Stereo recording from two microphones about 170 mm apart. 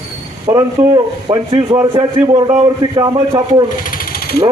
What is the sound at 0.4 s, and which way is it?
Speech, 20° right (ahead or behind).